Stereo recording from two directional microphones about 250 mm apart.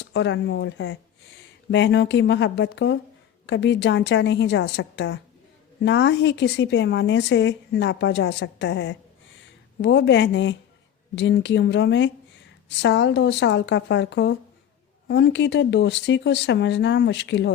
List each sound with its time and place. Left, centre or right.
0.0 s speech: left